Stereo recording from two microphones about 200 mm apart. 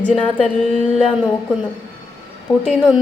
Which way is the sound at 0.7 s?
35° left (ahead or behind).